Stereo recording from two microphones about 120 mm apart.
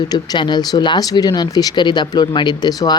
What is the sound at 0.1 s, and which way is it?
Speech, 40° left (ahead or behind).